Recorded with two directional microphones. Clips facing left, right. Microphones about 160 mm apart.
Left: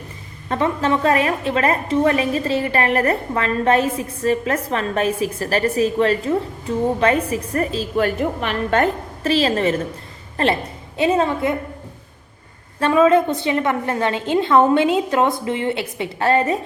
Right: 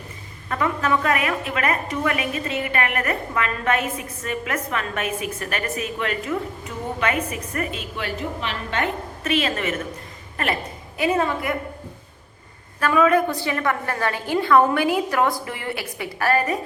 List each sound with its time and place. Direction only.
0.4 s a woman's voice: 30° left (ahead or behind)
8.0 s a woman's voice: 55° left (ahead or behind)
9.2 s a woman's voice: 30° left (ahead or behind)
12.8 s a woman's voice: 25° left (ahead or behind)